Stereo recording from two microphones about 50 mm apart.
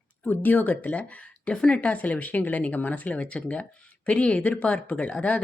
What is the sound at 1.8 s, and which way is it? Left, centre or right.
Speech, left.